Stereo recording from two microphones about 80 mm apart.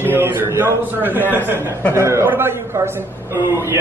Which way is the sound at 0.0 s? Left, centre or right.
Right.